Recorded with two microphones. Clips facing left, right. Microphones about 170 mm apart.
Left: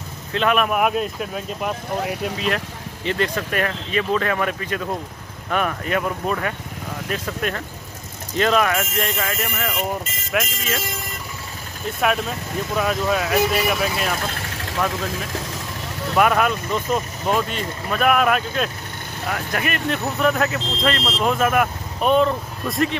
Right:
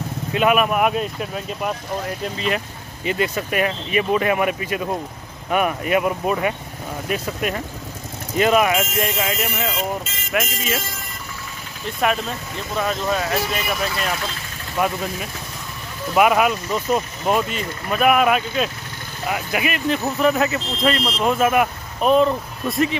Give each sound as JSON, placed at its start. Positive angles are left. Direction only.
{"t": 0.3, "sound": "speech", "side_deg": -10}
{"t": 0.7, "sound": "speech", "side_deg": 0}
{"t": 10.3, "sound": "speech", "side_deg": -5}
{"t": 12.7, "sound": "speech", "side_deg": 5}
{"t": 14.3, "sound": "vehicle", "side_deg": 65}
{"t": 16.2, "sound": "speech", "side_deg": -10}